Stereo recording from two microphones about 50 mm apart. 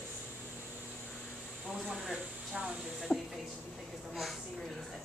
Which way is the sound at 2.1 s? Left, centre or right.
Centre.